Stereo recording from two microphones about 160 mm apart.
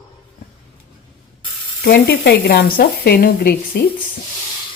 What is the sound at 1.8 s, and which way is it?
Speech, 90° left.